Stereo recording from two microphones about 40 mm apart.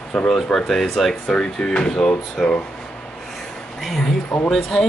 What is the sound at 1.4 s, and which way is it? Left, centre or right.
Speech, centre.